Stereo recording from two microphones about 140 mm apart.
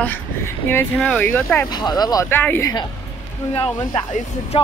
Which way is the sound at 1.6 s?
30° left (ahead or behind).